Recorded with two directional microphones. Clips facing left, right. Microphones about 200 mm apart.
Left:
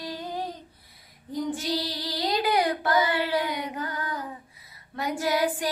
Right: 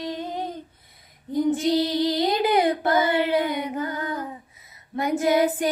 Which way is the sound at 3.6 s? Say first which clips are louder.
Right 5 dB; 25° right (ahead or behind).